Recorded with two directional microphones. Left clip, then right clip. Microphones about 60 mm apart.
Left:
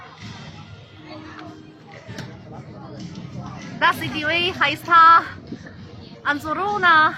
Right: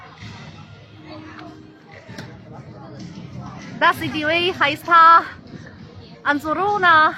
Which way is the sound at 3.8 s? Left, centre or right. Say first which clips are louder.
Right 2 dB; right.